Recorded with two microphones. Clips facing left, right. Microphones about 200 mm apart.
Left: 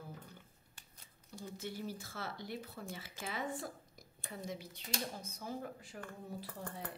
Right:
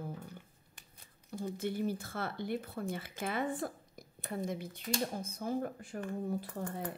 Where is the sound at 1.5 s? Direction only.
55° right (ahead or behind).